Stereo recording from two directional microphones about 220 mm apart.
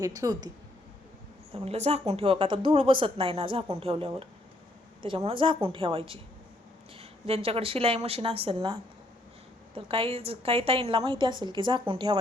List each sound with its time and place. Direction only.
0.0 s speech: 15° right (ahead or behind)
1.5 s speech: 30° right (ahead or behind)